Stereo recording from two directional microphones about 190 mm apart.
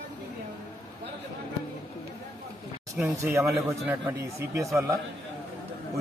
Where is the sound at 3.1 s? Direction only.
15° right (ahead or behind).